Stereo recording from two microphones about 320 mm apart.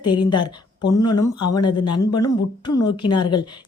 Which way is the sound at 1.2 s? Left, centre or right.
Left.